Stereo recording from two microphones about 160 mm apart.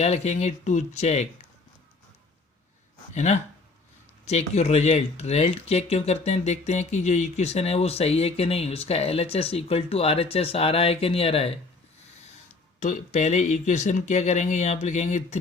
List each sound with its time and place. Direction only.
0.0 s speech: 45° left (ahead or behind)
3.2 s speech: 50° left (ahead or behind)
12.8 s speech: 50° left (ahead or behind)